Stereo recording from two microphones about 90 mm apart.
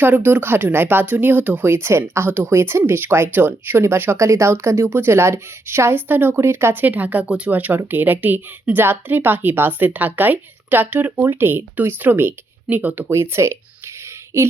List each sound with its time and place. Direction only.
0.0 s speech: 20° right (ahead or behind)